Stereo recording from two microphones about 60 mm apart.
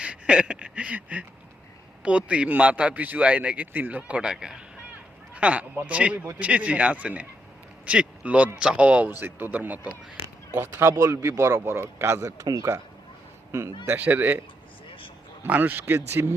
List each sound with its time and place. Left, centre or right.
0.0 s a sound: centre
2.0 s a man's voice: centre
5.3 s a man's voice: right
9.2 s a man's voice: right
10.6 s speech: right
12.7 s speech: right
13.5 s speech: right
13.8 s a man's voice: right
15.4 s speech: right